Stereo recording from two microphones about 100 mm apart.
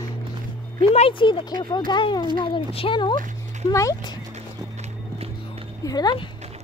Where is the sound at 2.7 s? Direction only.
65° left (ahead or behind).